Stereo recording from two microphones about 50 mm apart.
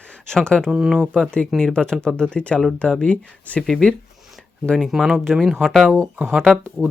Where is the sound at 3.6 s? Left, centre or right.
Centre.